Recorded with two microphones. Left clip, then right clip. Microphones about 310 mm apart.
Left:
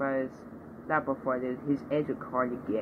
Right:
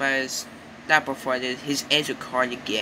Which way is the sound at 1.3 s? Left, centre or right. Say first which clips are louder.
Right 5 dB; right.